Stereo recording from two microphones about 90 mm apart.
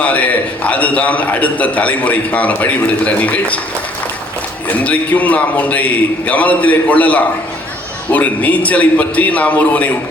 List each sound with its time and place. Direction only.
0.0 s a man's voice: 15° left (ahead or behind)
4.8 s a man's voice: 15° left (ahead or behind)